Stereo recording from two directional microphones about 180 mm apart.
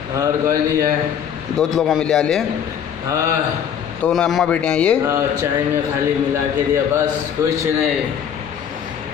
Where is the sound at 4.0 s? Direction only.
5° left (ahead or behind).